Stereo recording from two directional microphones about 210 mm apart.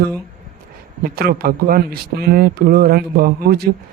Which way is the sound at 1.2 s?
45° right (ahead or behind).